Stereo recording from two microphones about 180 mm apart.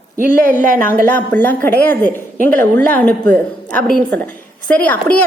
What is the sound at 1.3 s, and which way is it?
A woman's voice, 10° left (ahead or behind).